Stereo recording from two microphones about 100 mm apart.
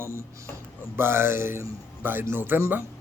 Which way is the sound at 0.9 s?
25° right (ahead or behind).